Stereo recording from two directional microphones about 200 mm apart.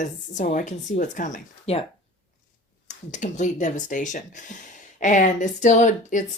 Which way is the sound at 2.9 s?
40° left (ahead or behind).